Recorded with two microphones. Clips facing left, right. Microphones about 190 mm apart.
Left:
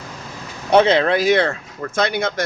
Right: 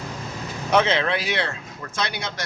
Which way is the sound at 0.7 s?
35° left (ahead or behind).